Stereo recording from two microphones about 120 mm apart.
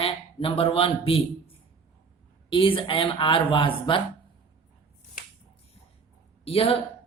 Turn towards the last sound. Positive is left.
turn(degrees=55)  # may be behind; listen again after turning